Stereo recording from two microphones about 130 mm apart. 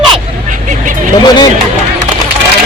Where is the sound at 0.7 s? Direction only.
80° right.